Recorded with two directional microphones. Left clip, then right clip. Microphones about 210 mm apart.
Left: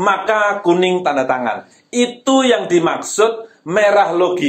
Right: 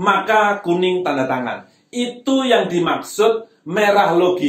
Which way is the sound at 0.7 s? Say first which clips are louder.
Left 3 dB; 15° left (ahead or behind).